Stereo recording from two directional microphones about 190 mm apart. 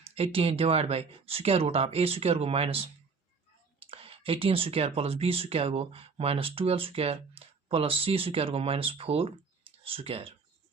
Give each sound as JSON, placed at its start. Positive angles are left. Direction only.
{"t": 0.1, "sound": "speech", "side_deg": -30}